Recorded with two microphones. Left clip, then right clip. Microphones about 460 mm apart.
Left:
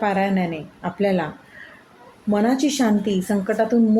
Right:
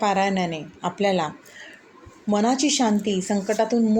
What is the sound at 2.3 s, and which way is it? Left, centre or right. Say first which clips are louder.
A woman's voice: left 1 dB; left.